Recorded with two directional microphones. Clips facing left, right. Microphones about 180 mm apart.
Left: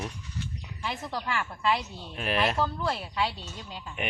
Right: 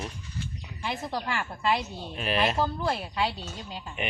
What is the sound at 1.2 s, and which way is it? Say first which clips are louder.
Speech: left 3 dB; 35° right (ahead or behind).